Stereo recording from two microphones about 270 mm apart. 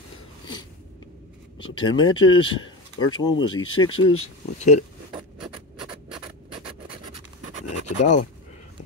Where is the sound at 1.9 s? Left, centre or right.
Centre.